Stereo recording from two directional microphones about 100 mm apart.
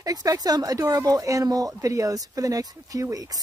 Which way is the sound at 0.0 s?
40° right (ahead or behind).